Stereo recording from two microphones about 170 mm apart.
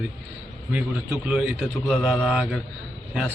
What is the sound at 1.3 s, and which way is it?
A man's voice, centre (ahead or behind).